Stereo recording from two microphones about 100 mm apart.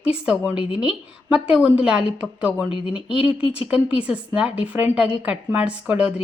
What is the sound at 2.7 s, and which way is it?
Speech, 55° left (ahead or behind).